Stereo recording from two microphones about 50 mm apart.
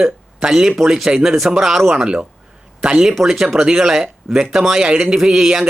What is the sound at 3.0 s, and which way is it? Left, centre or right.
Speech, centre.